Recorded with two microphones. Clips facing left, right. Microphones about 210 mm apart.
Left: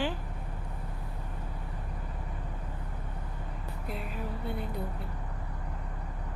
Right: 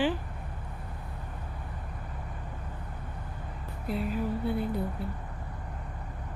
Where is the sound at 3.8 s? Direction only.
Centre (ahead or behind).